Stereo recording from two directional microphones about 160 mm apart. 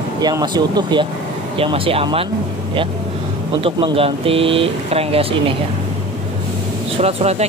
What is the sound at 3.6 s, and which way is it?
Speech, 35° right (ahead or behind).